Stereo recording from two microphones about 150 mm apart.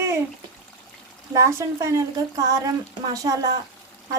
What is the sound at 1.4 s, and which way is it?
A woman's voice, 20° right (ahead or behind).